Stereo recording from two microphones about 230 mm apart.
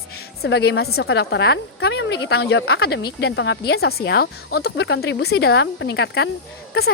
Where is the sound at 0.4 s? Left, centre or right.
Left.